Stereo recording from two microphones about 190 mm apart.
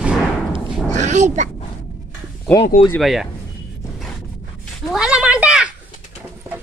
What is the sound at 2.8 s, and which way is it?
Speech, 5° left (ahead or behind).